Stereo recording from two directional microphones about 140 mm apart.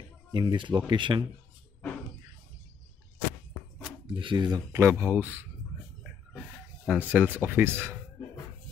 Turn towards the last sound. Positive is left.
turn(degrees=-15)  # may be behind; listen again after turning